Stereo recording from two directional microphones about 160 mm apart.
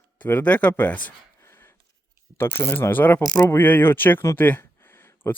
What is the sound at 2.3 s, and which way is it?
Speech, 15° left (ahead or behind).